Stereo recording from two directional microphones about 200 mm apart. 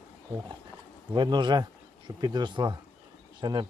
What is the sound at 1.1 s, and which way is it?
Speech, 25° right (ahead or behind).